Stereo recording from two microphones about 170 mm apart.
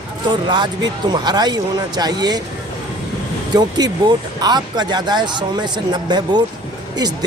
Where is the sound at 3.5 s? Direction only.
25° right (ahead or behind).